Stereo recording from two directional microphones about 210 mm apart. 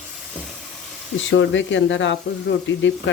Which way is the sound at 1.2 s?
60° left (ahead or behind).